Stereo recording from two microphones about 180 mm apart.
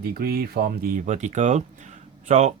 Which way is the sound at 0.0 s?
60° right (ahead or behind).